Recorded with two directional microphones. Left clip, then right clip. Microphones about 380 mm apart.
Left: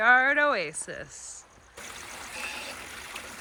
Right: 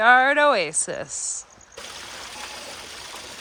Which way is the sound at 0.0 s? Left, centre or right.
Centre.